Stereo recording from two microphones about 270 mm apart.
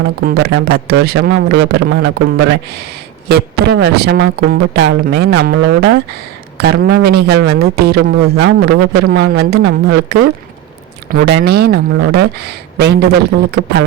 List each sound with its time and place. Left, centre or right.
0.3 s a man's voice: right
3.2 s a man's voice: right